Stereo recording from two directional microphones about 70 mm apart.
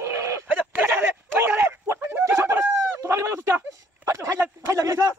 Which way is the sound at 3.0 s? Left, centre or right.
Right.